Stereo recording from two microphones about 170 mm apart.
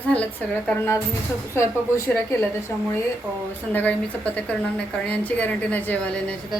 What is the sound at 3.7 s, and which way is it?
A woman's voice, 10° left (ahead or behind).